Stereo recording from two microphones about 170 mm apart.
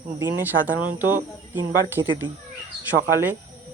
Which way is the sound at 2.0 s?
25° right (ahead or behind).